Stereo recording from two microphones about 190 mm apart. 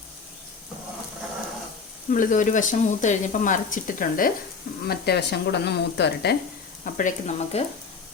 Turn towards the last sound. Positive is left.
turn(degrees=35)  # may be behind; listen again after turning